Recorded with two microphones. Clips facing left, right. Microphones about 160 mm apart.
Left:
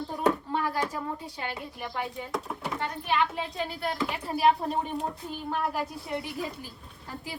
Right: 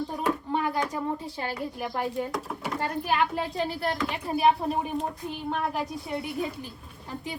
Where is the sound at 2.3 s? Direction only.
Centre (ahead or behind).